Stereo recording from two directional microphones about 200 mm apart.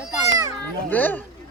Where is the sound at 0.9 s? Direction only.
10° left (ahead or behind).